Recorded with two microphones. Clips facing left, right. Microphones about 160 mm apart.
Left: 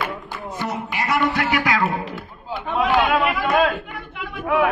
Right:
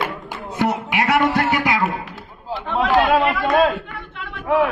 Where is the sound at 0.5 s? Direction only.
70° right (ahead or behind).